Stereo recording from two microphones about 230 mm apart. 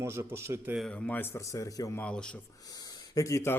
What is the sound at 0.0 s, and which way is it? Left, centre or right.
Speech, centre.